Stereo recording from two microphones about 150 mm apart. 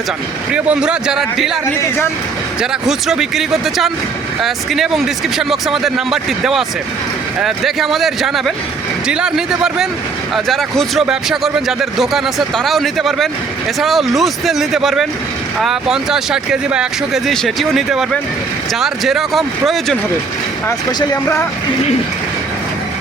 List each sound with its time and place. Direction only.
0.5 s speech: 5° right (ahead or behind)
2.6 s speech: 5° right (ahead or behind)
20.7 s speech: 15° left (ahead or behind)